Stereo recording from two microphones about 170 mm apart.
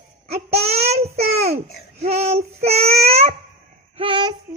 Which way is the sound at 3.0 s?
40° right (ahead or behind).